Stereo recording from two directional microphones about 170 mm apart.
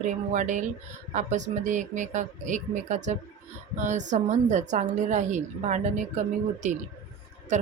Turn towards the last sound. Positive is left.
turn(degrees=-45)  # may be behind; listen again after turning